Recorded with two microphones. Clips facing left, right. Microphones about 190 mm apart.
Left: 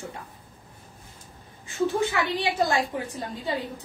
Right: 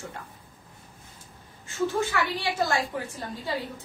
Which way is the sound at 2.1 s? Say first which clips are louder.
Left 2 dB; 20° left (ahead or behind).